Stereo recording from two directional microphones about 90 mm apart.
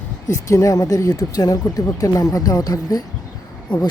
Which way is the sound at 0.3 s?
35° left (ahead or behind).